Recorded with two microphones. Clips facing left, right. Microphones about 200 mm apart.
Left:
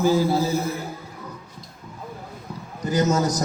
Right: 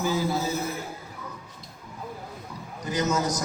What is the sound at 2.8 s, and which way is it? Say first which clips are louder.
Speech: left 5 dB; 35° left (ahead or behind).